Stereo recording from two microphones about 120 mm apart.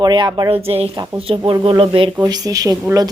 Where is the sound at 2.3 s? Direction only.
30° right (ahead or behind).